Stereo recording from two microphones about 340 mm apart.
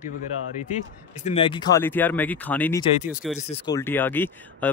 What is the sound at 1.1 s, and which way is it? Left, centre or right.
Speech, centre.